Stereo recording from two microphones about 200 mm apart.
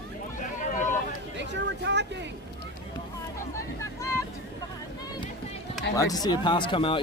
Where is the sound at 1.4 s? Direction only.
60° right (ahead or behind).